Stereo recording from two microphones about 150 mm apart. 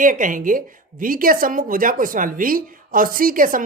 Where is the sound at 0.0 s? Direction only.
60° right (ahead or behind).